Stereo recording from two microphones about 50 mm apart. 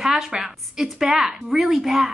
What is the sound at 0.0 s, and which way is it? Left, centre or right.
A woman's voice, centre.